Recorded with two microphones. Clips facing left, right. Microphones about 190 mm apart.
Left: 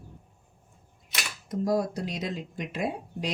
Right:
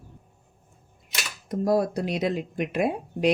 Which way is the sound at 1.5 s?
60° right (ahead or behind).